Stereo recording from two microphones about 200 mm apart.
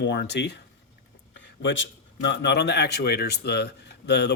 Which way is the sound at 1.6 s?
65° left (ahead or behind).